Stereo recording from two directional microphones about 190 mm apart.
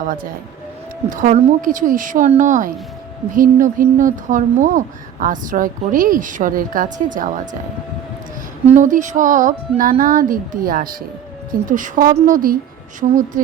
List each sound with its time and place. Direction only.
0.0 s a woman's voice: 45° right (ahead or behind)
8.6 s a woman's voice: 40° right (ahead or behind)